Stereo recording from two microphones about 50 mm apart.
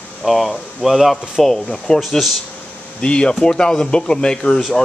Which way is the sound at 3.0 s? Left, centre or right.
Left.